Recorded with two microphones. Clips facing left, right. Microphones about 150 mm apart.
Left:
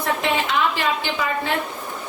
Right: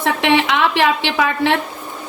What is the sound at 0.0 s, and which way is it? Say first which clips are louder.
A woman's voice: right 6 dB; 85° right.